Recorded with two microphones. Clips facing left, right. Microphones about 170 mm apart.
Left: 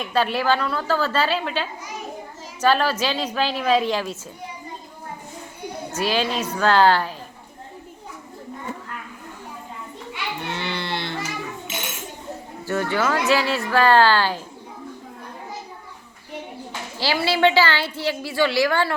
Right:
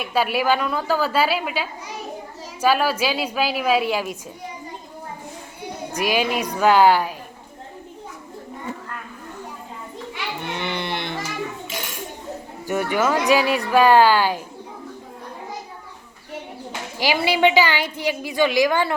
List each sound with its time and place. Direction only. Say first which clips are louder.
0.0 s a woman's voice: right 1 dB; 10° right (ahead or behind)
5.9 s a woman's voice: right 1 dB; 15° right (ahead or behind)
10.5 s children playing: right 2 dB; 15° right (ahead or behind)
12.6 s a woman's voice: right 1 dB; 15° right (ahead or behind)
17.0 s a woman's voice: right 1 dB; 15° right (ahead or behind)